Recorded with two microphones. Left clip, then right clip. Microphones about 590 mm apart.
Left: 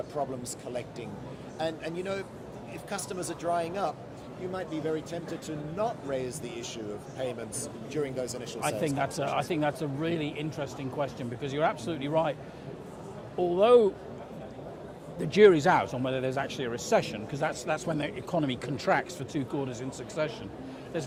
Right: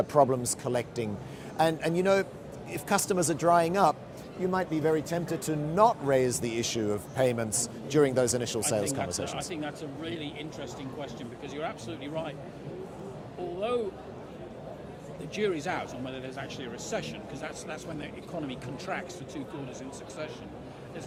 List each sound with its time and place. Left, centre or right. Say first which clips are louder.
0.2 s speech: right 11 dB; right
9.3 s speech: left 7 dB; left
13.6 s speech: left 10 dB; left
15.3 s speech: left 11 dB; left